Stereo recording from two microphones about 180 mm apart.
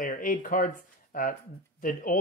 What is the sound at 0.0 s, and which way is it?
Speech, 45° left (ahead or behind).